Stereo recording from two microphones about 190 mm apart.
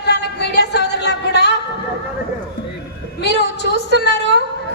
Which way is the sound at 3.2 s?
60° left (ahead or behind).